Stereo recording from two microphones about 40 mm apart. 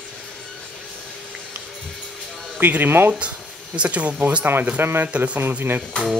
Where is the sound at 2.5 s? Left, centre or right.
Right.